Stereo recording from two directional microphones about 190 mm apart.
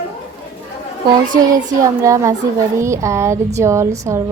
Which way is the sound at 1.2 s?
45° right (ahead or behind).